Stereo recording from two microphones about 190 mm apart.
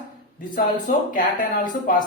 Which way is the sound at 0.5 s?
45° left (ahead or behind).